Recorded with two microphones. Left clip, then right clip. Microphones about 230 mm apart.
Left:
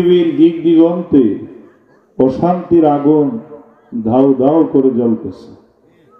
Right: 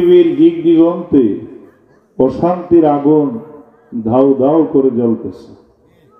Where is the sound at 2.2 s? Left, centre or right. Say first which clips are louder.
Even; left.